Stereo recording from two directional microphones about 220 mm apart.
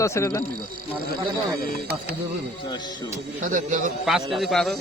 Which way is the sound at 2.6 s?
20° left (ahead or behind).